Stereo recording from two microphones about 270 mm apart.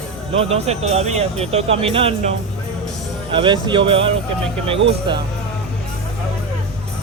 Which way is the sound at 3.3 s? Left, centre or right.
Centre.